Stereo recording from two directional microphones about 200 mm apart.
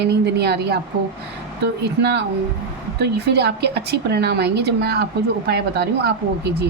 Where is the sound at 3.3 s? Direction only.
55° right (ahead or behind).